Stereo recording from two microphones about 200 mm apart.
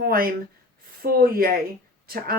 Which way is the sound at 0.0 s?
50° right (ahead or behind).